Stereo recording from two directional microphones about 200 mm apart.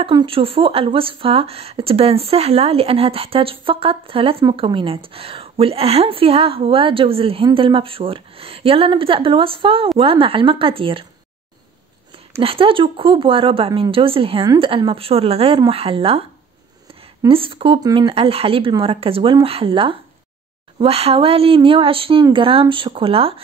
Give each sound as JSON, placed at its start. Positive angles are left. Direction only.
{"t": 0.0, "sound": "speech", "side_deg": -25}
{"t": 12.4, "sound": "speech", "side_deg": -25}
{"t": 17.3, "sound": "speech", "side_deg": -25}